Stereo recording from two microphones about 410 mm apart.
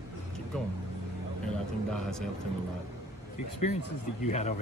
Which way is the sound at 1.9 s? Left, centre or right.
Centre.